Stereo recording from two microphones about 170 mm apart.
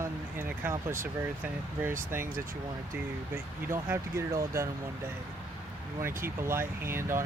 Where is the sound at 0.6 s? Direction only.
15° right (ahead or behind).